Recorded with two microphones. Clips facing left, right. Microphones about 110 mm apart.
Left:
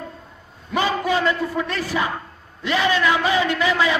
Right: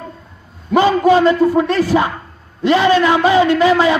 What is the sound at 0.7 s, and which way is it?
A man's voice, 35° right (ahead or behind).